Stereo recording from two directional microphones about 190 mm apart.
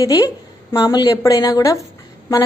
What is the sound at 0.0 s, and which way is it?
A woman's voice, 20° left (ahead or behind).